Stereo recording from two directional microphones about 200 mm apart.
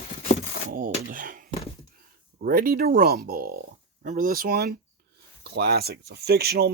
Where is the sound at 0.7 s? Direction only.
45° right (ahead or behind).